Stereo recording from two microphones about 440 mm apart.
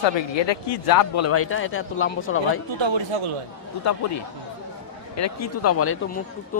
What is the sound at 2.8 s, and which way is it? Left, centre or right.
Speech, right.